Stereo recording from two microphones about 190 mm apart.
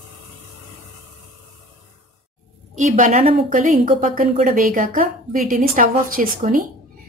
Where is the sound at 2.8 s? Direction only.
40° right (ahead or behind).